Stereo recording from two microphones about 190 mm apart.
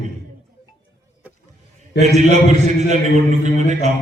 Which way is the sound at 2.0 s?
35° right (ahead or behind).